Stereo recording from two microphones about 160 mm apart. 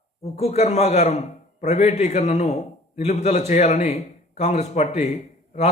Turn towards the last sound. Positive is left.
turn(degrees=45)  # may be behind; listen again after turning